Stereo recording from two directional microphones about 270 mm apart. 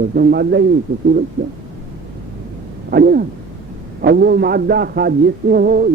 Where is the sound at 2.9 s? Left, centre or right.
Right.